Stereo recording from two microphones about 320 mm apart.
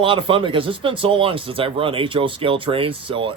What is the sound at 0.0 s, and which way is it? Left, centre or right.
A man's voice, centre.